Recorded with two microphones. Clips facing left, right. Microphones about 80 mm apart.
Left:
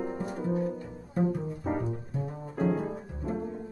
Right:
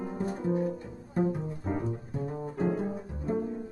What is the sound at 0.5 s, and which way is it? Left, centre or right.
Music, centre.